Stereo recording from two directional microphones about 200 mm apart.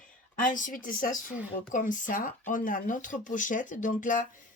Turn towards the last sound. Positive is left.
turn(degrees=40)  # may be behind; listen again after turning